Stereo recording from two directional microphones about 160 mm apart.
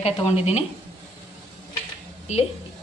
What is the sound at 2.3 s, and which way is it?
Speech, 45° left (ahead or behind).